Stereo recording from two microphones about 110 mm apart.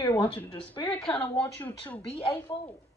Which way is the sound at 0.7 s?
55° left (ahead or behind).